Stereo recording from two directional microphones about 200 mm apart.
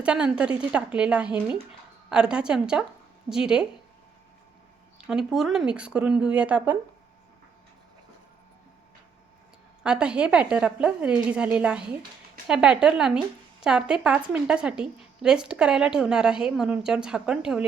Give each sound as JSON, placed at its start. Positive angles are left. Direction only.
{"t": 0.0, "sound": "speech", "side_deg": -5}
{"t": 5.0, "sound": "speech", "side_deg": -5}
{"t": 9.8, "sound": "speech", "side_deg": -5}